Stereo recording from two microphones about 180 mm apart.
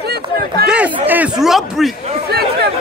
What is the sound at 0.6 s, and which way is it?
Speech, 5° right (ahead or behind).